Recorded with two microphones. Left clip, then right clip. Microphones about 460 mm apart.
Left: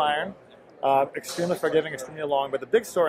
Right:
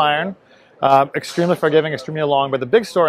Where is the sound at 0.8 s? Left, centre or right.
Right.